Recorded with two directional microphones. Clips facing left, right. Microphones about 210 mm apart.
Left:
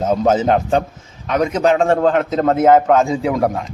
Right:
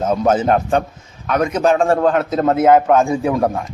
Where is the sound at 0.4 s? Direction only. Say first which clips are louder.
Even; 25° left (ahead or behind).